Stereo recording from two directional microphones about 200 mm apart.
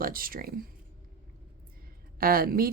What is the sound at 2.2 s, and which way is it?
Speech, 45° right (ahead or behind).